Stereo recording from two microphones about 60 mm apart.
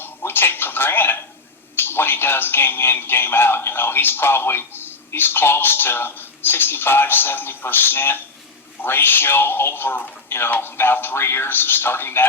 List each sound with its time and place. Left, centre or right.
0.0 s television: left
1.7 s a man's voice: left